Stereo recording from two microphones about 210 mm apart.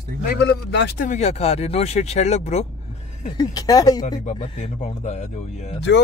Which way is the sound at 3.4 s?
20° left (ahead or behind).